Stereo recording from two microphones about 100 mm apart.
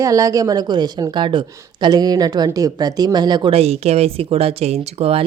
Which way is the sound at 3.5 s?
90° right.